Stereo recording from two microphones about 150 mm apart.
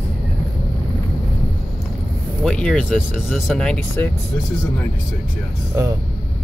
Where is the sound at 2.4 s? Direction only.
5° left (ahead or behind).